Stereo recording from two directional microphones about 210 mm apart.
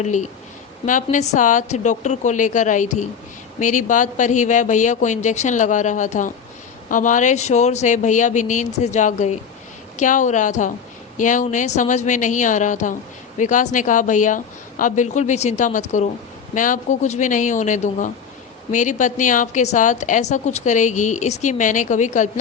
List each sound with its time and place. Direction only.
0.0 s a woman's voice: 35° left (ahead or behind)